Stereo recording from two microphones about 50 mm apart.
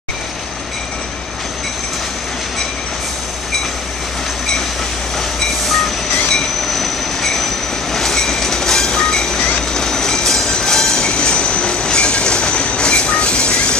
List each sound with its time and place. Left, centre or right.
6.3 s train: centre